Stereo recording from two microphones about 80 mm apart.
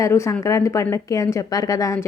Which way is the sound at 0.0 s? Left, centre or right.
Left.